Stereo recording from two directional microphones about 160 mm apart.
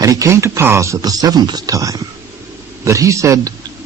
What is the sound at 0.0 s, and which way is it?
A man's voice, 20° right (ahead or behind).